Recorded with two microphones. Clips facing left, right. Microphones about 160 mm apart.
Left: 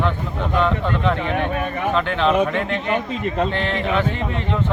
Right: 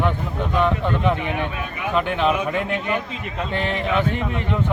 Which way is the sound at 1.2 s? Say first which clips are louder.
Left 4 dB; 50° left (ahead or behind).